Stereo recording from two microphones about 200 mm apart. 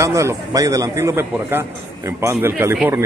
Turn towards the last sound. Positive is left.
turn(degrees=-10)  # may be behind; listen again after turning